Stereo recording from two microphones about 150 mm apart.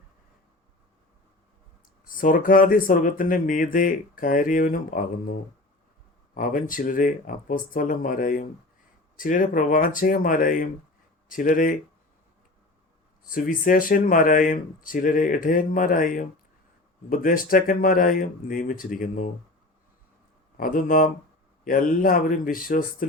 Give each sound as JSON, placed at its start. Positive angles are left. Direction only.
{"t": 2.0, "sound": "speech", "side_deg": 65}
{"t": 6.3, "sound": "speech", "side_deg": 65}
{"t": 13.3, "sound": "speech", "side_deg": 65}
{"t": 20.6, "sound": "speech", "side_deg": 70}